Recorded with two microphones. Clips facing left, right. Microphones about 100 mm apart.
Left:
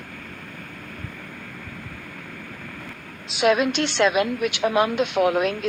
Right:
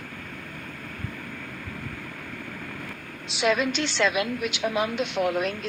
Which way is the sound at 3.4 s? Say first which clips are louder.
Left 4 dB; 60° left (ahead or behind).